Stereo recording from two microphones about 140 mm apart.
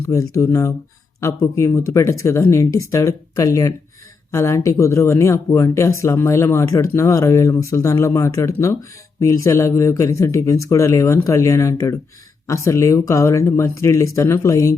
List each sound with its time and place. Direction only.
0.1 s speech: 25° left (ahead or behind)